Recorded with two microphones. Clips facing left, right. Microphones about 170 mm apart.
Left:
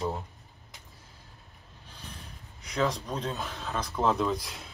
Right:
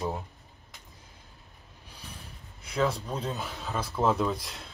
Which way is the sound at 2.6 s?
Centre (ahead or behind).